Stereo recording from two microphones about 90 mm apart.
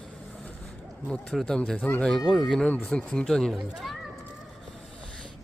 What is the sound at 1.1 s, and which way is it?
Speech, 5° left (ahead or behind).